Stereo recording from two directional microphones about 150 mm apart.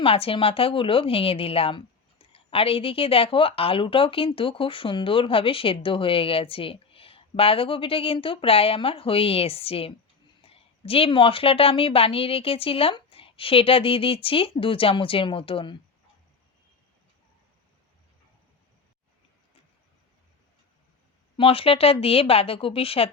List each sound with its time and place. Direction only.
0.0 s a woman's voice: 40° left (ahead or behind)
21.3 s a woman's voice: 40° left (ahead or behind)